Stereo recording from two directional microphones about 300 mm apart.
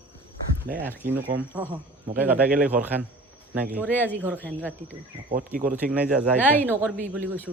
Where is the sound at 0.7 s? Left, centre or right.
Right.